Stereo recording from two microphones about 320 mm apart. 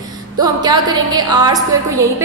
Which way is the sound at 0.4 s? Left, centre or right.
Centre.